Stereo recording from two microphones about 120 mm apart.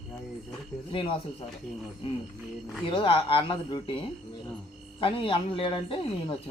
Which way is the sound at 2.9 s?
45° left (ahead or behind).